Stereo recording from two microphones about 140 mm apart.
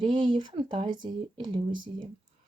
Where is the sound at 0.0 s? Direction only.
35° right (ahead or behind).